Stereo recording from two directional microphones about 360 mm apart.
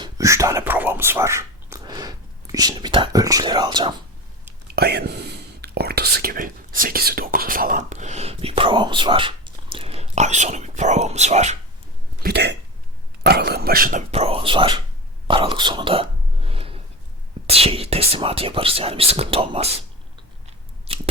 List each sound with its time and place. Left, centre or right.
0.0 s speech: centre
4.7 s speech: right
15.3 s whispering: centre
17.4 s speech: centre
20.9 s crunch: centre